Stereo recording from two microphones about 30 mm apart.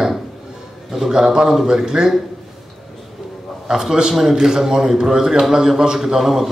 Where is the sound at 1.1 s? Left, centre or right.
Right.